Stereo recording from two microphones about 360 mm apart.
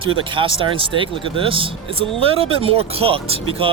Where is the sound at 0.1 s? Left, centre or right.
Centre.